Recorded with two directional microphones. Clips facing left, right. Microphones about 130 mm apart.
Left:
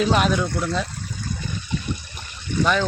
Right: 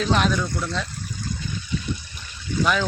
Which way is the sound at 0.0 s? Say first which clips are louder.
Left 2 dB; 5° left (ahead or behind).